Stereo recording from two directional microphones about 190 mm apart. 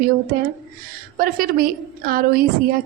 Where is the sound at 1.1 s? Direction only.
50° right (ahead or behind).